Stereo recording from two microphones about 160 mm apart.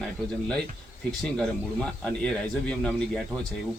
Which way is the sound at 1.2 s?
5° left (ahead or behind).